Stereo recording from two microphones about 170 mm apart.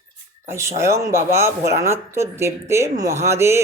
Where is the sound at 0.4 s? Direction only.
15° right (ahead or behind).